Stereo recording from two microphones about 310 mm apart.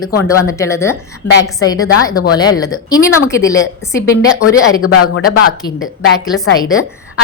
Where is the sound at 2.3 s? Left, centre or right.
Centre.